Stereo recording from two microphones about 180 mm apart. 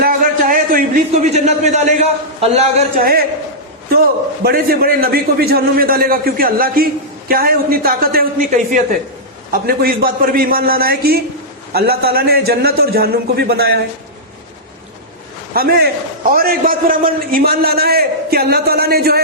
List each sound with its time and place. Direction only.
0.0 s a man's voice: 50° right (ahead or behind)
2.9 s a man's voice: 55° right (ahead or behind)
4.4 s a man's voice: 55° right (ahead or behind)
15.5 s a man's voice: 55° right (ahead or behind)